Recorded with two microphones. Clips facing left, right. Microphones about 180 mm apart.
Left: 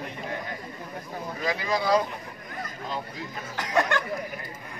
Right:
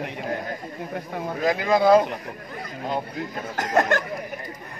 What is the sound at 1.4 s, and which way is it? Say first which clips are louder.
Speech: right 8 dB; 55° right (ahead or behind).